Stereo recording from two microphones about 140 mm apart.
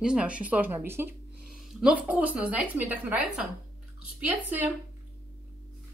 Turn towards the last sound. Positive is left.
turn(degrees=-15)  # may be behind; listen again after turning